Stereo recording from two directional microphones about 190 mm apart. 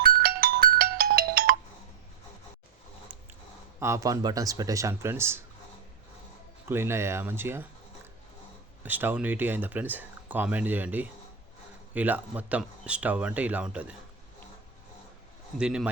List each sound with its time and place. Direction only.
0.0 s ringtone: 50° right (ahead or behind)
3.8 s speech: 15° right (ahead or behind)
6.7 s speech: 10° right (ahead or behind)
8.8 s speech: 10° right (ahead or behind)
15.5 s speech: 5° right (ahead or behind)